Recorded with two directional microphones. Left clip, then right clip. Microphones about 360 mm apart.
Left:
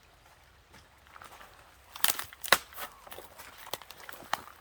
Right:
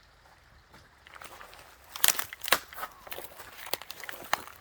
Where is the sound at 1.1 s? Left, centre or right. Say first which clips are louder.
Right 3 dB; right.